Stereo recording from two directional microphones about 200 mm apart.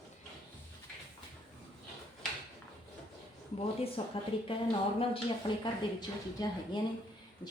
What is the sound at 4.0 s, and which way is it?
Speech, 25° left (ahead or behind).